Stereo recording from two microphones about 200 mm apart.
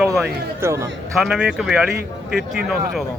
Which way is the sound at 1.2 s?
5° right (ahead or behind).